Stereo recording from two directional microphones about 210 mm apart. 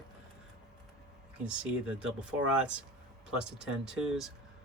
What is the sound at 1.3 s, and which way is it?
Speech, 5° right (ahead or behind).